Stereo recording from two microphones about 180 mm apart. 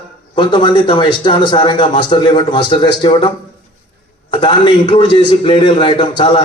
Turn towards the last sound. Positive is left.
turn(degrees=30)  # may be behind; listen again after turning